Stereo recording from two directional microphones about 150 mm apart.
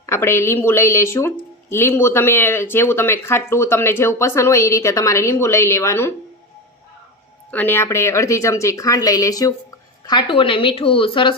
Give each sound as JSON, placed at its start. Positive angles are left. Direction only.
{"t": 0.0, "sound": "speech", "side_deg": 15}
{"t": 7.5, "sound": "a woman's voice", "side_deg": 15}